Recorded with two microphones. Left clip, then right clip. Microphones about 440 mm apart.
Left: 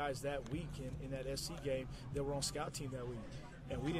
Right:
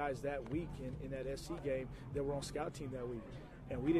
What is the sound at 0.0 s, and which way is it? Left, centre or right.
A man's voice, left.